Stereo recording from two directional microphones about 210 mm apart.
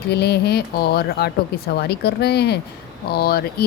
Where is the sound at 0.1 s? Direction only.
50° left (ahead or behind).